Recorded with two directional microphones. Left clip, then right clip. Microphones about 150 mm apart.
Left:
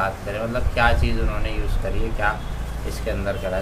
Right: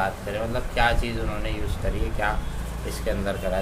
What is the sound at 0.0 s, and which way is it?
Speech, 10° right (ahead or behind).